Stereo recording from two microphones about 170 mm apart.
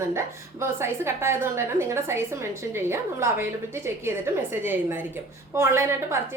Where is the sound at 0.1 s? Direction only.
15° right (ahead or behind).